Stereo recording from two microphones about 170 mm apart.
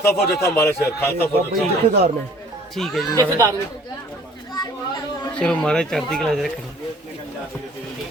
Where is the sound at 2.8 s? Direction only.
Centre (ahead or behind).